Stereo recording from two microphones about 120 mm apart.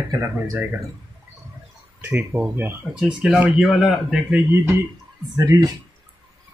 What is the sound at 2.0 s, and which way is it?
A man's voice, 10° right (ahead or behind).